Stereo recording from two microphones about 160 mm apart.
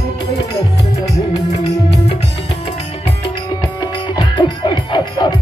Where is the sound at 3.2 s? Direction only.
25° left (ahead or behind).